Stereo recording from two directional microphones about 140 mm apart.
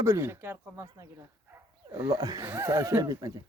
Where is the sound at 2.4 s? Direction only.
20° right (ahead or behind).